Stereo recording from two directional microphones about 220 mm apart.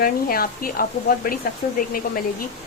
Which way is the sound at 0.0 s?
40° left (ahead or behind).